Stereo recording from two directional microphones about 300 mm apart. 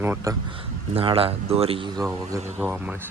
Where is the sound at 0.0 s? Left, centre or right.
Centre.